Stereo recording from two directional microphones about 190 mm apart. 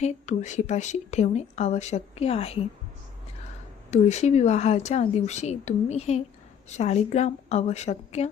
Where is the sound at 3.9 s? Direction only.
35° left (ahead or behind).